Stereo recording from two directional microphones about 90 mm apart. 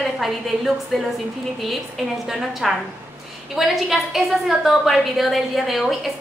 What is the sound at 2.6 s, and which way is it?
A woman's voice, centre (ahead or behind).